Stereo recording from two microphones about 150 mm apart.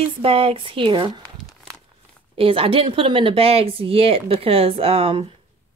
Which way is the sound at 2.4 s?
40° right (ahead or behind).